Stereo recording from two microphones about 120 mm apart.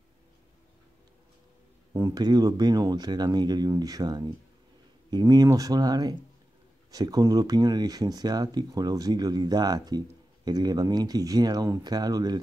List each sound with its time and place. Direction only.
2.0 s speech: 30° right (ahead or behind)